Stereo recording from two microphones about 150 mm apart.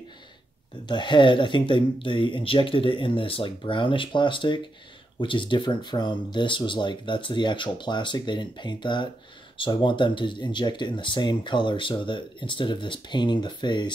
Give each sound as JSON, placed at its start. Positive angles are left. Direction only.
{"t": 0.8, "sound": "speech", "side_deg": 30}